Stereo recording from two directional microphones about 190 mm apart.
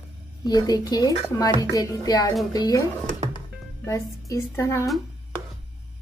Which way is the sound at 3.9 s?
15° left (ahead or behind).